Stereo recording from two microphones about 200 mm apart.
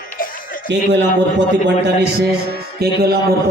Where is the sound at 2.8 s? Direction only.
50° right (ahead or behind).